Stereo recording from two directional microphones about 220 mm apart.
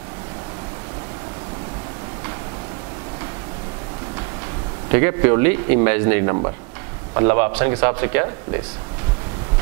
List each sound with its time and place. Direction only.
5.0 s a man's voice: 15° right (ahead or behind)